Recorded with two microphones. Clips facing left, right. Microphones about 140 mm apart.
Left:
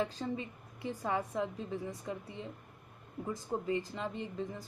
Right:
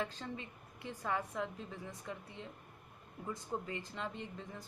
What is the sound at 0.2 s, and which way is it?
A woman's voice, 20° left (ahead or behind).